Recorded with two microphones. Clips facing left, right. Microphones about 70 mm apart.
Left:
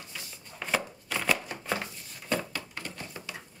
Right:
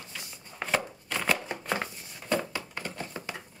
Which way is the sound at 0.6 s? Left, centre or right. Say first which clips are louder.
Right 1 dB; centre.